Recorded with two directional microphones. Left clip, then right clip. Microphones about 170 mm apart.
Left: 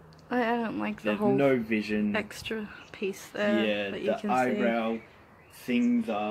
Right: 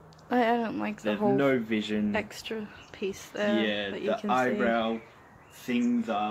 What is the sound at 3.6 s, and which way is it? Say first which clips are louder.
Speech: left 1 dB; 15° left (ahead or behind).